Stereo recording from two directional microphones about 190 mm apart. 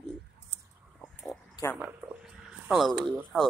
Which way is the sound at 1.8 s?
5° right (ahead or behind).